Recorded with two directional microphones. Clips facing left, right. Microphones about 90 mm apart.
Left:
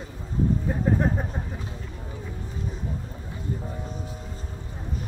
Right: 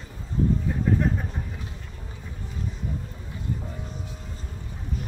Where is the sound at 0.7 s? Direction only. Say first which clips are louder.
Even; 35° left (ahead or behind).